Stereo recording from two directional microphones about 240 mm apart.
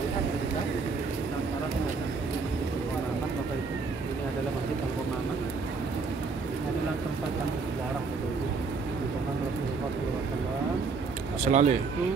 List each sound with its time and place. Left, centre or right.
11.4 s speech: right